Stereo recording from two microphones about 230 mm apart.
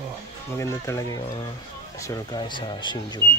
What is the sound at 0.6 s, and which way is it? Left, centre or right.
Speech, centre.